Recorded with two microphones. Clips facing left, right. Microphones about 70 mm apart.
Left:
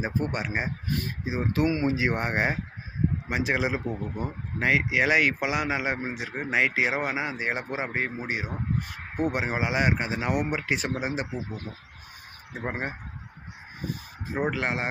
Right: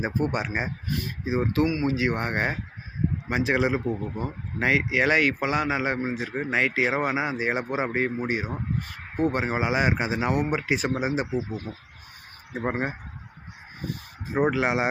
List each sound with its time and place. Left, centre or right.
0.0 s speech: centre
1.6 s speech: left
3.2 s speech: centre
14.3 s speech: centre